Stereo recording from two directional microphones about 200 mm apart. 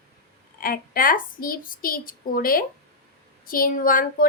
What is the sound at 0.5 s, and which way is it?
A woman's voice, 45° left (ahead or behind).